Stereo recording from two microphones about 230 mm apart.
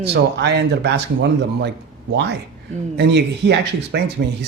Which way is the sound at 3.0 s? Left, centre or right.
Right.